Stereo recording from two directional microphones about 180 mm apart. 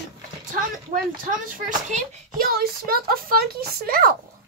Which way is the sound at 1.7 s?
40° right (ahead or behind).